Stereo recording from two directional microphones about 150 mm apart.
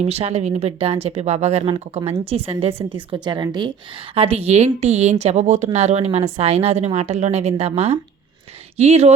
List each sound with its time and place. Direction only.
0.0 s a woman's voice: 45° right (ahead or behind); by 3.7 s 30° right (ahead or behind)
4.1 s speech: 40° right (ahead or behind)